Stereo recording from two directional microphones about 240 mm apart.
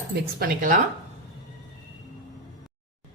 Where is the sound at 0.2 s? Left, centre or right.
Right.